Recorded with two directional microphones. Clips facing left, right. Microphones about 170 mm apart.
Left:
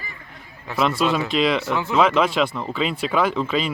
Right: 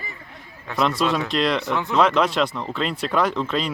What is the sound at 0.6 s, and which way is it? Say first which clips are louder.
Speech: left 1 dB; centre (ahead or behind).